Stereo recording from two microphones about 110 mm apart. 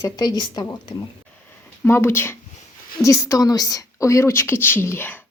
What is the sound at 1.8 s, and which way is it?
A woman's voice, 20° left (ahead or behind).